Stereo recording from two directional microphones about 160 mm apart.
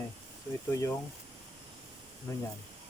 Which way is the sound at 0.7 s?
20° left (ahead or behind).